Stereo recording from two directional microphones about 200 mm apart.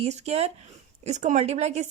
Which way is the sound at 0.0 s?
35° right (ahead or behind).